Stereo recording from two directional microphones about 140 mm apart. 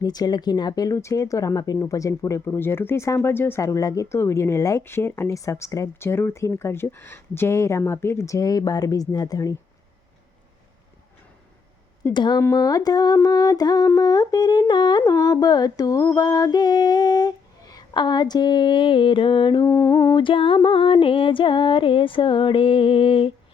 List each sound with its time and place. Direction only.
0.0 s speech: 30° left (ahead or behind)
12.1 s music: 30° left (ahead or behind)
12.4 s speech: 25° left (ahead or behind)
14.7 s music: 30° left (ahead or behind)
15.0 s speech: 25° left (ahead or behind)
19.7 s speech: 20° left (ahead or behind)
20.1 s music: 40° left (ahead or behind)